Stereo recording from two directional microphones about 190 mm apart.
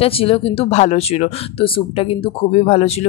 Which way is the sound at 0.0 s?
30° left (ahead or behind).